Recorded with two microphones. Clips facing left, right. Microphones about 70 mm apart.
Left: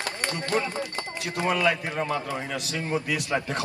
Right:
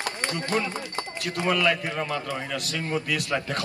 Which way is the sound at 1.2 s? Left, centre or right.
Left.